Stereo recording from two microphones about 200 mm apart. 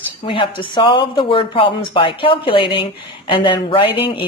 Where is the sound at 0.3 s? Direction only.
25° left (ahead or behind).